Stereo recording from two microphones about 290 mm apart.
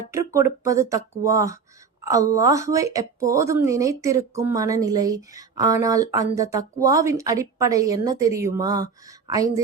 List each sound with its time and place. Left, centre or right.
0.1 s a woman's voice: centre